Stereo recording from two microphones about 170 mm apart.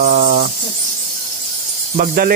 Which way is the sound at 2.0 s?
60° right (ahead or behind).